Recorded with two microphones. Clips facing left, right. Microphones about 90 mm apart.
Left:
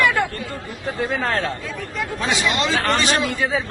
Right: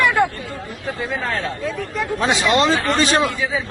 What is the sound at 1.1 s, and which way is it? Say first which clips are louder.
Speech: left 1 dB; 60° left (ahead or behind).